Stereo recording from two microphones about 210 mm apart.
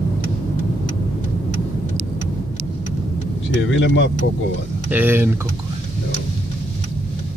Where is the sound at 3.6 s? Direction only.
65° left (ahead or behind).